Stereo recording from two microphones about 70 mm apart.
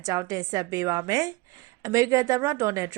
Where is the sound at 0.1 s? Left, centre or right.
Right.